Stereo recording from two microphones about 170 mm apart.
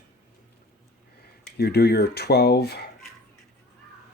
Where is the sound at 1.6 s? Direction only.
70° left (ahead or behind).